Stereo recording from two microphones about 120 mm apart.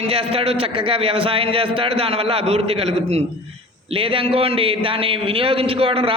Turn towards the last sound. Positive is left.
turn(degrees=-50)  # may be behind; listen again after turning